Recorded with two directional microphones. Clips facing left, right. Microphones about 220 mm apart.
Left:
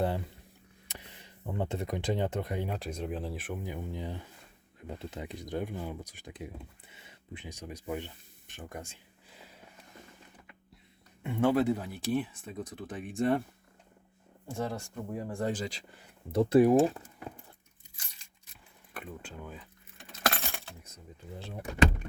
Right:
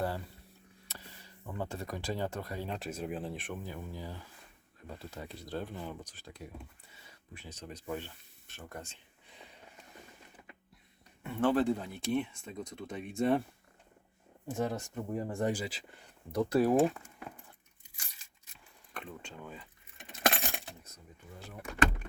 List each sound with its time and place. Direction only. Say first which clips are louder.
0.9 s speech: left 3 dB; 20° left (ahead or behind)
2.6 s speech: left 2 dB; centre (ahead or behind)
3.6 s speech: left 4 dB; 20° left (ahead or behind)
11.2 s speech: left 2 dB; 15° left (ahead or behind)
14.4 s speech: right 1 dB; 20° right (ahead or behind)
16.3 s speech: left 5 dB; 25° left (ahead or behind)
16.9 s keys jangling: left 3 dB; 35° left (ahead or behind)
18.9 s speech: left 2 dB; 5° left (ahead or behind)
20.0 s keys jangling: right 1 dB; 20° right (ahead or behind)
21.3 s speech: left 6 dB; 30° left (ahead or behind)